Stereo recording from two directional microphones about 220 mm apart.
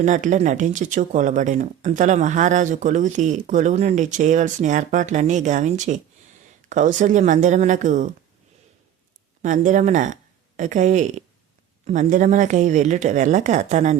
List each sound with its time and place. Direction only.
0.0 s speech: 35° right (ahead or behind)
9.4 s speech: 35° right (ahead or behind)